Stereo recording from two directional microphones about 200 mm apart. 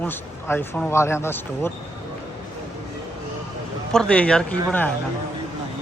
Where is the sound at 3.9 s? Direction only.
5° left (ahead or behind).